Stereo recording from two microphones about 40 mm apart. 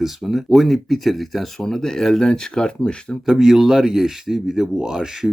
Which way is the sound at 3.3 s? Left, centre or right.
Centre.